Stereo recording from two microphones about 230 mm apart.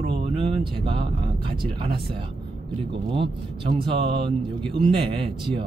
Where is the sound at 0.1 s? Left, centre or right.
Right.